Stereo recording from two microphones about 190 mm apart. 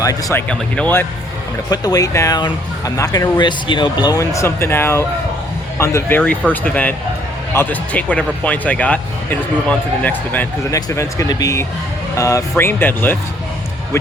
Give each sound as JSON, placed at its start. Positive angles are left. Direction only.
{"t": 0.0, "sound": "speech", "side_deg": 15}
{"t": 1.7, "sound": "speech", "side_deg": 20}